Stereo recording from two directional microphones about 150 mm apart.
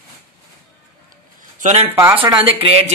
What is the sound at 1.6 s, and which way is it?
Speech, 45° right (ahead or behind).